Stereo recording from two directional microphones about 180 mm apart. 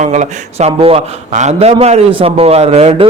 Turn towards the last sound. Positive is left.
turn(degrees=-35)  # may be behind; listen again after turning